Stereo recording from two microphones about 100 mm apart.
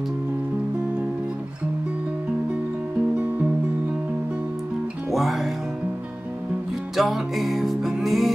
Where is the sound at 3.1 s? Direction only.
15° right (ahead or behind).